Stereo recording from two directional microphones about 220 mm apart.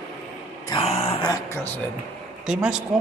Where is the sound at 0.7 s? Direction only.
20° left (ahead or behind).